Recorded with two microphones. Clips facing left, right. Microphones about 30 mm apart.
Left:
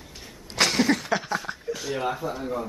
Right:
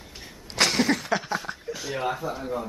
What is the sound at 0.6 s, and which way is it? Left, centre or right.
Speech, centre.